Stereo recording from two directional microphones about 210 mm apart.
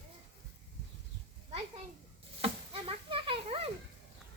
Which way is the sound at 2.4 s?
25° right (ahead or behind).